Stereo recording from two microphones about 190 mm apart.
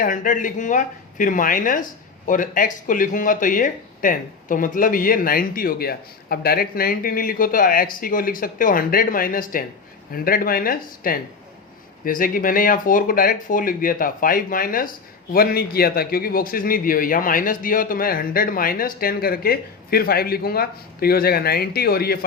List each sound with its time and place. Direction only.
0.0 s speech: 45° left (ahead or behind)